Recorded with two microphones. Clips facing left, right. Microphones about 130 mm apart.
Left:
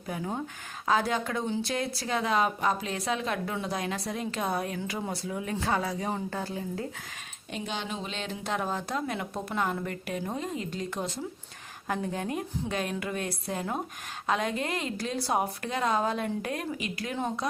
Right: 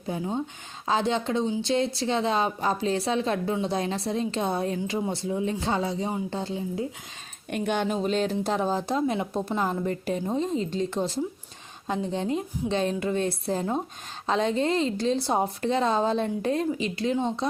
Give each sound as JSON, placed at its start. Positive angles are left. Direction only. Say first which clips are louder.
{"t": 0.1, "sound": "a woman's voice", "louder": "right 3 dB", "side_deg": -25}
{"t": 7.5, "sound": "a woman's voice", "louder": "right 8 dB", "side_deg": -55}